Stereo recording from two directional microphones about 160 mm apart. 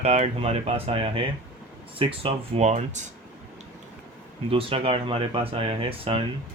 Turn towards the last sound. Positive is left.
turn(degrees=-35)  # may be behind; listen again after turning